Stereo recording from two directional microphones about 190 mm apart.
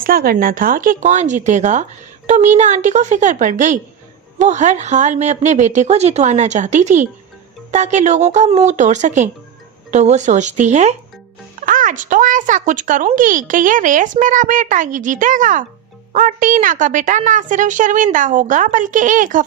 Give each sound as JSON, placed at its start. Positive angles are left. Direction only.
{"t": 0.0, "sound": "a woman's voice", "side_deg": -50}